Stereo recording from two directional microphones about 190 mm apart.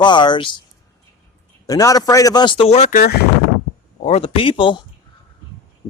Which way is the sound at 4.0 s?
35° left (ahead or behind).